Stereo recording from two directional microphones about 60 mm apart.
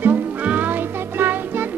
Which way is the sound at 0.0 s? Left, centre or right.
Right.